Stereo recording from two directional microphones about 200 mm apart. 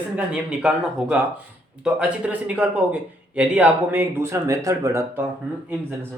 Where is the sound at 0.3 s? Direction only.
5° right (ahead or behind).